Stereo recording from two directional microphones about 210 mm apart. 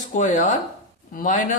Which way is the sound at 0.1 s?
35° left (ahead or behind).